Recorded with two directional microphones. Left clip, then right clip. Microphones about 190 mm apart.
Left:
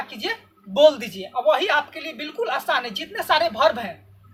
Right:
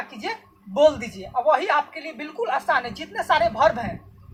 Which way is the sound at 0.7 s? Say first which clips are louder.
Left 2 dB; 10° left (ahead or behind).